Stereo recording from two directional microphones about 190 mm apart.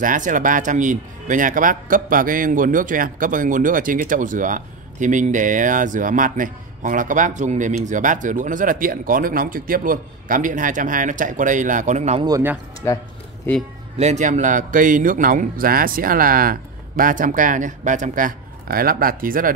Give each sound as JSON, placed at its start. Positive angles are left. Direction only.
{"t": 0.0, "sound": "speech", "side_deg": -45}
{"t": 12.3, "sound": "speech", "side_deg": -15}
{"t": 12.8, "sound": "speech", "side_deg": 15}
{"t": 13.9, "sound": "speech", "side_deg": -35}